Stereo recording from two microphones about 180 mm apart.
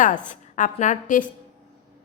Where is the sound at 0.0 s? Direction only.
45° left (ahead or behind).